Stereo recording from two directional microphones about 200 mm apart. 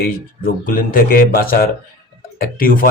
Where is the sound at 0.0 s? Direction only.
45° left (ahead or behind).